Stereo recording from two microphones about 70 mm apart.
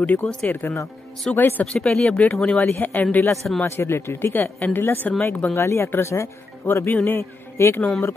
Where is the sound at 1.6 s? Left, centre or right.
Centre.